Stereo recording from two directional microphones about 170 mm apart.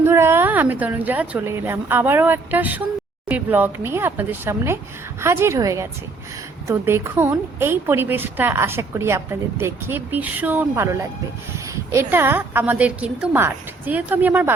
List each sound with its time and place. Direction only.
0.0 s a woman's voice: 15° right (ahead or behind)